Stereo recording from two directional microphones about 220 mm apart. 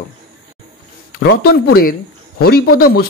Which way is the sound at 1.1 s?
45° left (ahead or behind).